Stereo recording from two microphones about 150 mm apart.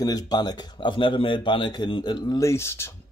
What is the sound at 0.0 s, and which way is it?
Speech, 25° left (ahead or behind).